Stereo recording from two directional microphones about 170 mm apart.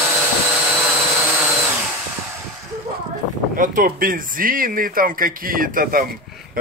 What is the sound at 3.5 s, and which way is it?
Speech, 55° right (ahead or behind).